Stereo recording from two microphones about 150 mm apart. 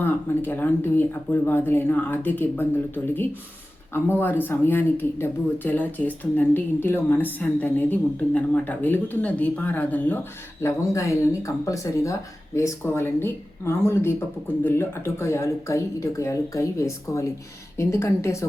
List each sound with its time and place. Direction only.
0.0 s a woman's voice: 15° left (ahead or behind)